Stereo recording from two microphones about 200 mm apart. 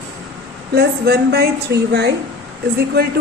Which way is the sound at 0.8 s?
55° right (ahead or behind).